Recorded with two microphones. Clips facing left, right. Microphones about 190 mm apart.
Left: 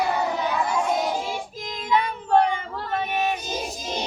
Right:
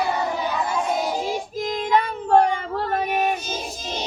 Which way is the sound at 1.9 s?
45° right (ahead or behind).